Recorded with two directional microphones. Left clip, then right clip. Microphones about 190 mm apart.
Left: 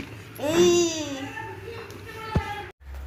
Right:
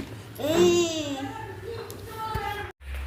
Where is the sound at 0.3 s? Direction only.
20° left (ahead or behind).